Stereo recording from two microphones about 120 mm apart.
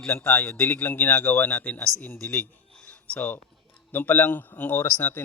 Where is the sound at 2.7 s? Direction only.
10° left (ahead or behind).